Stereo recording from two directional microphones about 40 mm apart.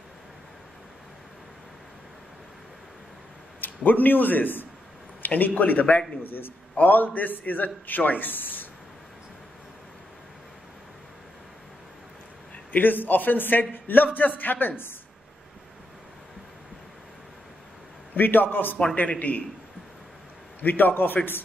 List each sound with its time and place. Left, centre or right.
3.6 s a man's voice: left
5.2 s a sound: left
5.5 s a man's voice: left
6.2 s a man's voice: left
12.7 s a man's voice: left
18.1 s a man's voice: left
18.9 s a man's voice: left
20.6 s a man's voice: left